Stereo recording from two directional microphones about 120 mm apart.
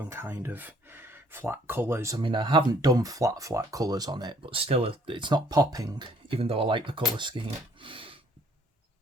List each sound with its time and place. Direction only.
0.0 s speech: 20° right (ahead or behind)
2.2 s speech: 45° right (ahead or behind)
6.2 s speech: 50° right (ahead or behind)